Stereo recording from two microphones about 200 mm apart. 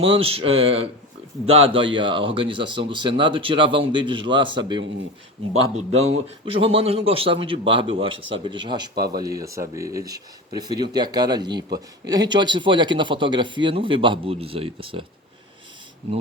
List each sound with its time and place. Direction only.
0.0 s speech: 30° right (ahead or behind)